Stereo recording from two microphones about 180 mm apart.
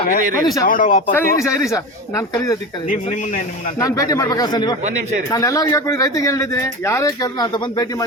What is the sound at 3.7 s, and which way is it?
Speech, 20° left (ahead or behind).